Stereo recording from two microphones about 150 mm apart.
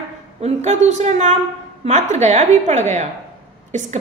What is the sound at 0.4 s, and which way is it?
A woman's voice, 50° right (ahead or behind).